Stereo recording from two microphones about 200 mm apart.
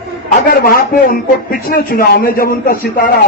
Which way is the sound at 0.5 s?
45° left (ahead or behind).